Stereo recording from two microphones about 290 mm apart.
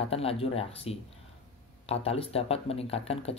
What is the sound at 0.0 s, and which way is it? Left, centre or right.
Speech, centre.